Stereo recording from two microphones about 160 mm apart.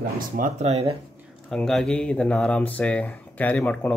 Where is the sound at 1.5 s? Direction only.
5° left (ahead or behind).